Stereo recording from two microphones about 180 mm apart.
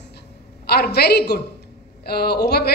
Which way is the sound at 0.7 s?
65° left (ahead or behind).